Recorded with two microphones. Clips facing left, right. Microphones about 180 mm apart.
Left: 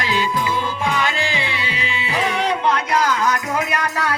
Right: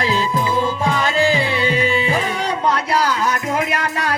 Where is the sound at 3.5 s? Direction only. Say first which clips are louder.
Right 2 dB; 25° right (ahead or behind).